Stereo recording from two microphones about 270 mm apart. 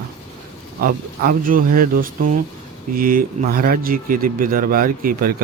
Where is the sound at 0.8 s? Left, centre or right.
Right.